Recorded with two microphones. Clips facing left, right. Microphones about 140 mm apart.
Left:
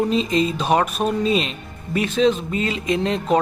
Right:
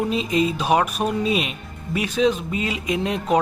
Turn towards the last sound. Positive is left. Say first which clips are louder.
# left 2 dB
turn(degrees=-10)  # may be behind; listen again after turning